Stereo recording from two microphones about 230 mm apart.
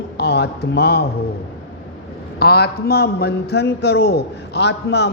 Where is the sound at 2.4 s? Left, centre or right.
Left.